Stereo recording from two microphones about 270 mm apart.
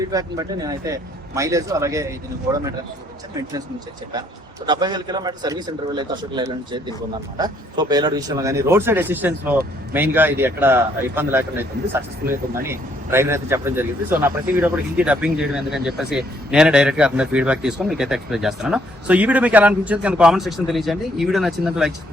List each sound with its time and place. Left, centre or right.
0.0 s speech: centre
4.6 s a man's voice: centre